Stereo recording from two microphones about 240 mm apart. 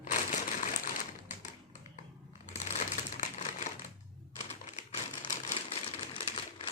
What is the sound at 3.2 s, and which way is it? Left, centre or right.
Typewriter, left.